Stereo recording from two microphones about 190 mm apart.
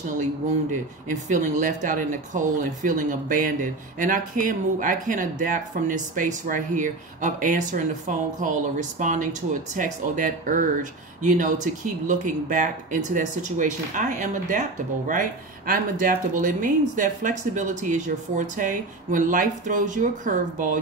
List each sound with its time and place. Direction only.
1.3 s speech: 40° right (ahead or behind)